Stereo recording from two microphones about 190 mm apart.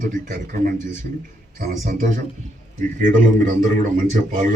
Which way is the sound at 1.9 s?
40° right (ahead or behind).